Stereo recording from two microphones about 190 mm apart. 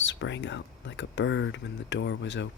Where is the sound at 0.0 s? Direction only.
75° left (ahead or behind).